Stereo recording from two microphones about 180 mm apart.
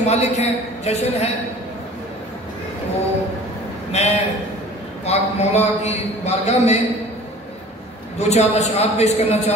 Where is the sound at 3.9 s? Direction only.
35° left (ahead or behind).